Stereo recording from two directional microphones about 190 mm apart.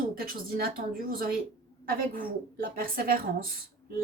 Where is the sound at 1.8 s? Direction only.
50° right (ahead or behind).